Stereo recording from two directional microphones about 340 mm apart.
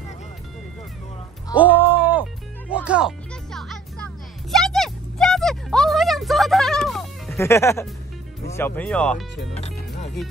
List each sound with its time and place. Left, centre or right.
1.5 s music: centre
8.5 s speech: centre
9.6 s music: centre